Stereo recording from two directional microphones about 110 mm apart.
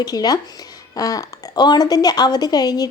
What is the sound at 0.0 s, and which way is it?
A woman's voice, 35° left (ahead or behind).